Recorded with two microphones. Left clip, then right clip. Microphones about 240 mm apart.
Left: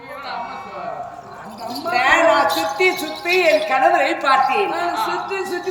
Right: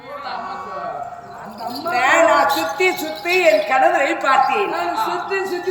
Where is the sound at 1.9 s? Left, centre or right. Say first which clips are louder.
Even; centre.